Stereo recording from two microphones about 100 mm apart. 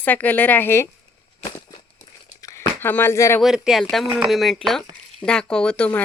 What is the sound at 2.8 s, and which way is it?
Speech, 20° left (ahead or behind).